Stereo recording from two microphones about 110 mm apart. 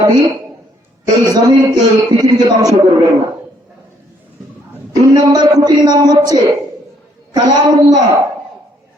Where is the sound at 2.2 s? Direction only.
35° right (ahead or behind).